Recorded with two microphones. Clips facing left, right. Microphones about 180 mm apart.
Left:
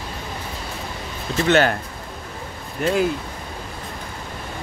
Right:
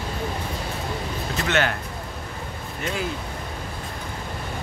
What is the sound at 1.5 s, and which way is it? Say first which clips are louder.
Speech: left 7 dB; 35° left (ahead or behind).